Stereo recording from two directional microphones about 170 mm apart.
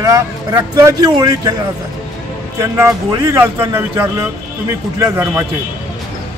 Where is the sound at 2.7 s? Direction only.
20° right (ahead or behind).